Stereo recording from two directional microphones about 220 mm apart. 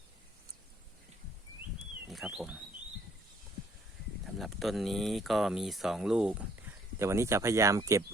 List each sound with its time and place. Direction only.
2.0 s speech: centre (ahead or behind)
4.4 s speech: centre (ahead or behind)